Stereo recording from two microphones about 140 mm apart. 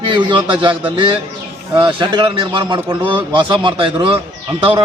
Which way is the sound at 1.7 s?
35° right (ahead or behind).